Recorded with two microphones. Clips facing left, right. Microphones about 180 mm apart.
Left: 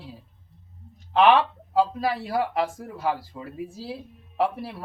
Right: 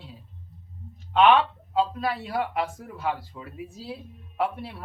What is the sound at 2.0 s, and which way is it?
A man's voice, 35° left (ahead or behind).